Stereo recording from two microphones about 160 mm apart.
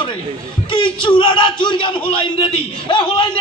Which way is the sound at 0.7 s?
30° left (ahead or behind).